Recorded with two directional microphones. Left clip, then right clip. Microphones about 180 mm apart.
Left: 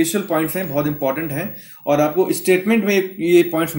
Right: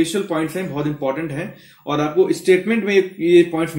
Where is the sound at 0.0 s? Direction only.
35° left (ahead or behind).